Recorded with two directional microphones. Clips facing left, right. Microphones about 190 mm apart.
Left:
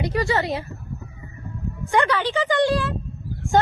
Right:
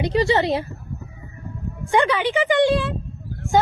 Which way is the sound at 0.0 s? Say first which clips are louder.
Right 4 dB; 20° right (ahead or behind).